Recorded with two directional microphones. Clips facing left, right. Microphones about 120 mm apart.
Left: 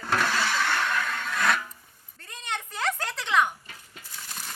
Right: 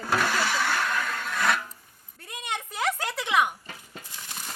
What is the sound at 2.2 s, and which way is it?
Goat, 10° right (ahead or behind).